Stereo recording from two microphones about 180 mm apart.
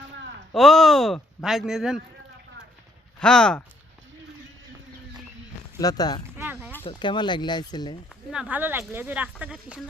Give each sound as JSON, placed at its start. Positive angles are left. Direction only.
{"t": 0.5, "sound": "speech", "side_deg": 0}
{"t": 3.2, "sound": "speech", "side_deg": 5}
{"t": 5.8, "sound": "speech", "side_deg": 20}
{"t": 6.3, "sound": "a sound", "side_deg": -10}
{"t": 6.8, "sound": "speech", "side_deg": 25}
{"t": 8.1, "sound": "speech", "side_deg": -5}